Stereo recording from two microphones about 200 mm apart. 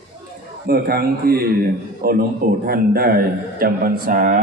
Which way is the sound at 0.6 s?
50° right (ahead or behind).